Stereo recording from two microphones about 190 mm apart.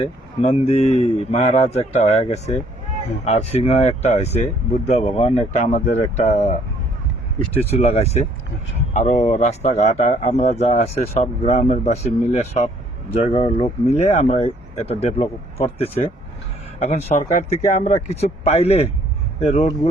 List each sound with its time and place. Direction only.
0.0 s speech: 35° left (ahead or behind)
7.6 s speech: 35° left (ahead or behind)